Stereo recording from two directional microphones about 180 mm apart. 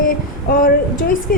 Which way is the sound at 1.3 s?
55° left (ahead or behind).